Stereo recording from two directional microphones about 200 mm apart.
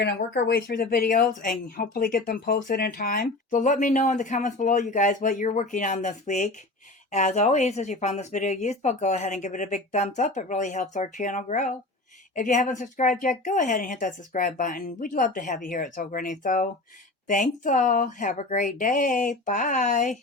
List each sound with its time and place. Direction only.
0.0 s speech: 55° left (ahead or behind); by 20.1 s 40° left (ahead or behind)